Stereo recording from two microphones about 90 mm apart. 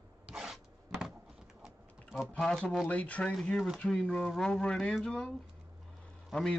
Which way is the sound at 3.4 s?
5° left (ahead or behind).